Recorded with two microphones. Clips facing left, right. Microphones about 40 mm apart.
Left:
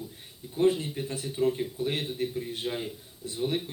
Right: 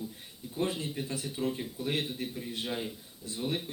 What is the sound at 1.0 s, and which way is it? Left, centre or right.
Speech, left.